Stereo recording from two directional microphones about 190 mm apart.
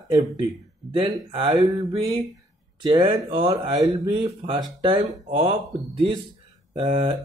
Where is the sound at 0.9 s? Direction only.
25° right (ahead or behind).